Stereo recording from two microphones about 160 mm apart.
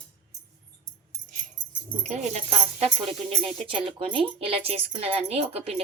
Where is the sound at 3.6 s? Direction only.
35° right (ahead or behind).